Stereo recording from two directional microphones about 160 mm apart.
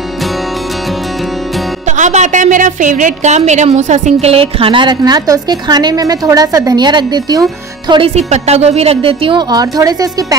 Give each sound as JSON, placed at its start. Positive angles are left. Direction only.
{"t": 1.9, "sound": "a woman's voice", "side_deg": -50}
{"t": 7.9, "sound": "a woman's voice", "side_deg": -40}